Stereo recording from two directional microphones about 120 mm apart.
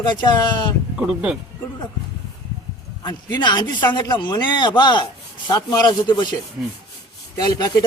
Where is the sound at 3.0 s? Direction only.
35° left (ahead or behind).